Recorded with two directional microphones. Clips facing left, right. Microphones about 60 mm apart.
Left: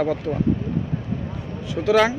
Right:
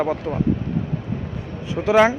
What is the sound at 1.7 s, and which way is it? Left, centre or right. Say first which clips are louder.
Speech: right 2 dB; right.